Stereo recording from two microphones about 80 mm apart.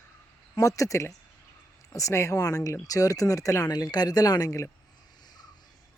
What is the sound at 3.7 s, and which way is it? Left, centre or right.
Speech, left.